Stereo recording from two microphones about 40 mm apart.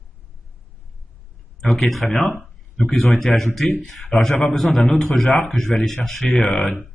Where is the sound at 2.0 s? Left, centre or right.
Centre.